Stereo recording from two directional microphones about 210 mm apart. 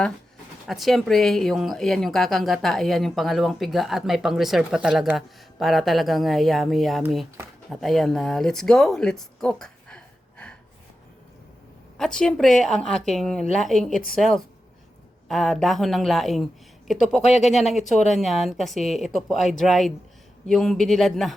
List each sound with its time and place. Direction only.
0.7 s speech: centre (ahead or behind)
11.9 s speech: 5° left (ahead or behind)
17.2 s speech: 35° left (ahead or behind)
17.6 s speech: centre (ahead or behind)